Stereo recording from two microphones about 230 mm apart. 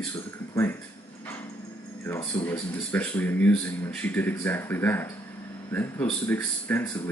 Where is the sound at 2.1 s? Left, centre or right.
Centre.